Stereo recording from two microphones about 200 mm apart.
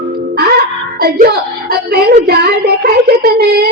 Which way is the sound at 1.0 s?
55° right (ahead or behind).